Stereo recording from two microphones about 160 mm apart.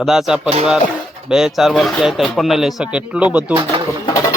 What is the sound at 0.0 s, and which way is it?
Speech, centre (ahead or behind).